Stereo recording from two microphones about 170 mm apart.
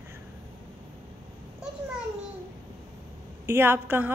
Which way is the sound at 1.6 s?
5° right (ahead or behind).